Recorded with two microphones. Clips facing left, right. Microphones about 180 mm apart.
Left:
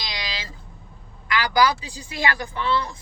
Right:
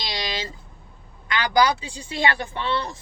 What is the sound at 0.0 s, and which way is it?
Vehicle, 30° right (ahead or behind).